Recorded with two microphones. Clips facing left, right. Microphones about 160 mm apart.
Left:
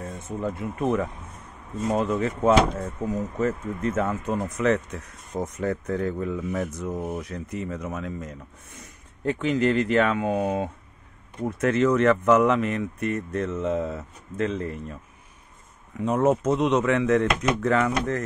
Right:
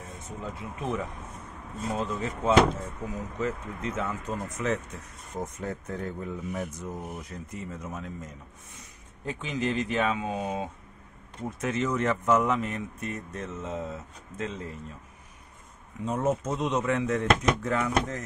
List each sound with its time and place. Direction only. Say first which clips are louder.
0.0 s speech: left 8 dB; 55° left (ahead or behind)
3.1 s speech: left 6 dB; 45° left (ahead or behind); by 4.7 s 65° left (ahead or behind)
5.4 s speech: left 7 dB; 75° left (ahead or behind)
9.2 s speech: left 8 dB; 65° left (ahead or behind)
16.1 s speech: left 7 dB; 75° left (ahead or behind)